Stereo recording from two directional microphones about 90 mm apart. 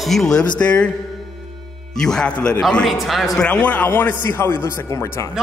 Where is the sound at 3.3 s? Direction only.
10° left (ahead or behind); by 5.2 s 25° left (ahead or behind).